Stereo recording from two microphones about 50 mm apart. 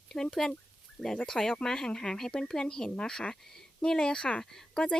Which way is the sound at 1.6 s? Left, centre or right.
Centre.